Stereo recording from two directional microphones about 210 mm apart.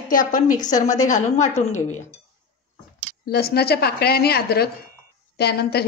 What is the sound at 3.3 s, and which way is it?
A woman's voice, 50° left (ahead or behind).